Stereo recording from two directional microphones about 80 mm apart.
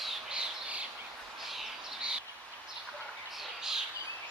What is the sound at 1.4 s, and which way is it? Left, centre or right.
Bird, centre.